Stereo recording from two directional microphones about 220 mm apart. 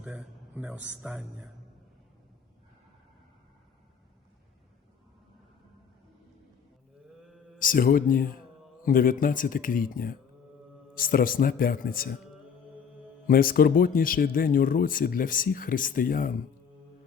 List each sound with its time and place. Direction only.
0.0 s speech: 5° right (ahead or behind)
7.6 s speech: 40° left (ahead or behind)
13.2 s speech: 40° left (ahead or behind)